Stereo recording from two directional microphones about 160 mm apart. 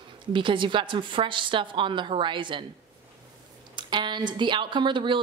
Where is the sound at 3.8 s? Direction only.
30° right (ahead or behind).